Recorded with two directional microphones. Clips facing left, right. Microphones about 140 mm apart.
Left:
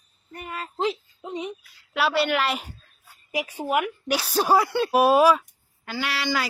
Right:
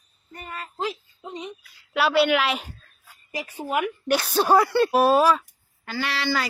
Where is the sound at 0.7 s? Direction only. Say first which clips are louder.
Left 4 dB; 20° left (ahead or behind).